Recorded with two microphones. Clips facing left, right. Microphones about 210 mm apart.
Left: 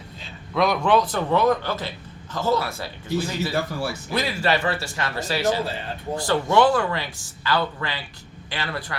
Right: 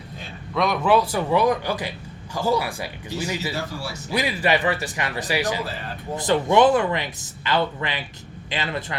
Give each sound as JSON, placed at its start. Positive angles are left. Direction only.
{"t": 0.5, "sound": "speech", "side_deg": 0}
{"t": 3.5, "sound": "speech", "side_deg": 55}
{"t": 4.1, "sound": "speech", "side_deg": -15}